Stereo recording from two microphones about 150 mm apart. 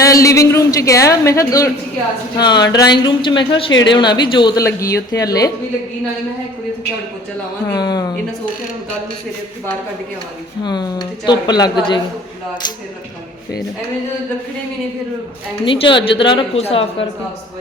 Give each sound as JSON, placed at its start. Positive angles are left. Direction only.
{"t": 0.0, "sound": "speech", "side_deg": 20}
{"t": 7.7, "sound": "speech", "side_deg": 25}
{"t": 10.6, "sound": "speech", "side_deg": 30}
{"t": 15.6, "sound": "a woman's voice", "side_deg": 35}